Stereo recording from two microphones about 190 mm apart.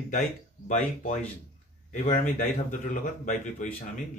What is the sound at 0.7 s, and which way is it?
Speech, 40° left (ahead or behind).